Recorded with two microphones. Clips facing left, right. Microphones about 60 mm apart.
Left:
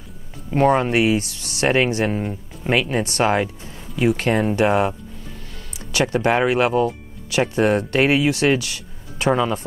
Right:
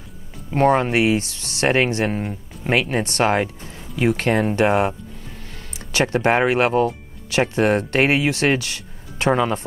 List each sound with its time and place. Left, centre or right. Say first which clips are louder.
0.6 s speech: even; right